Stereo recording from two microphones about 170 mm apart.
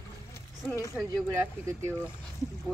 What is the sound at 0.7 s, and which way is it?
Speech, 15° left (ahead or behind).